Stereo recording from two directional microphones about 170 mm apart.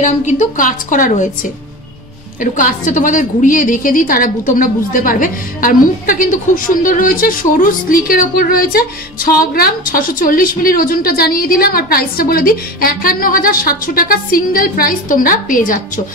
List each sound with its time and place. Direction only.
0.0 s a woman's voice: 45° left (ahead or behind)